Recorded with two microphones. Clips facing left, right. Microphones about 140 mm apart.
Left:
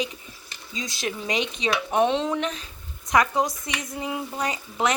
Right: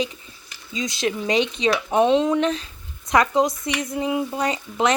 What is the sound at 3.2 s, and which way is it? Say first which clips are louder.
Speech: right 4 dB; 25° right (ahead or behind).